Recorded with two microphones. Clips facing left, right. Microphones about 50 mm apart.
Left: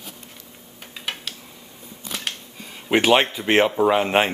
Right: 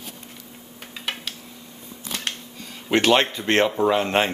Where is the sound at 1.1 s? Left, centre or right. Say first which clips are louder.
Even; centre.